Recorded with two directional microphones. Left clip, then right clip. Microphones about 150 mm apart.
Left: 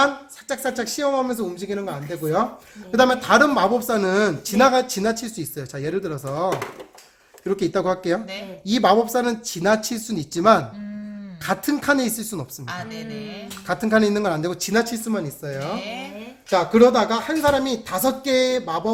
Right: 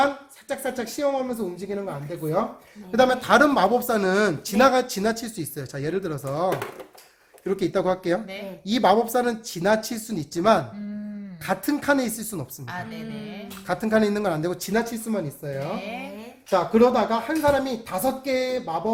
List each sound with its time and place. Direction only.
0.0 s a woman's voice: 5° left (ahead or behind)
2.9 s a woman's voice: centre (ahead or behind)
15.6 s a woman's voice: 15° left (ahead or behind)